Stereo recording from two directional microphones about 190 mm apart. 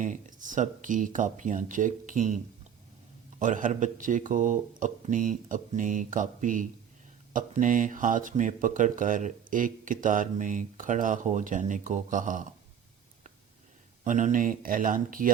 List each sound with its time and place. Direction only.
0.0 s speech: 45° right (ahead or behind)
14.0 s speech: 40° right (ahead or behind)